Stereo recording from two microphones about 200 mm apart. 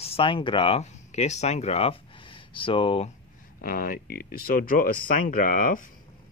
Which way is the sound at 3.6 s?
45° left (ahead or behind).